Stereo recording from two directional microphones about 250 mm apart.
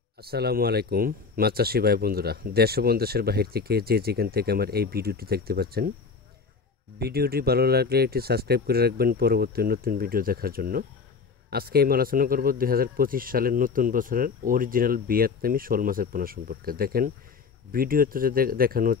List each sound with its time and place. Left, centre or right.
0.2 s speech: right
7.0 s speech: right